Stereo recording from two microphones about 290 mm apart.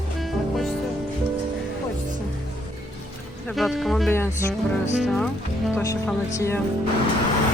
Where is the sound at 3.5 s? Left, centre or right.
Centre.